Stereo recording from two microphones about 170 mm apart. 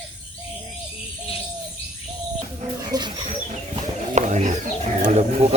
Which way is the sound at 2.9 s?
25° right (ahead or behind).